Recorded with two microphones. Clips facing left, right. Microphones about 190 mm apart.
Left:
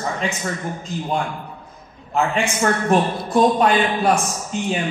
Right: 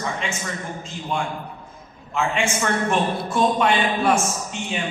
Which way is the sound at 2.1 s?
40° left (ahead or behind).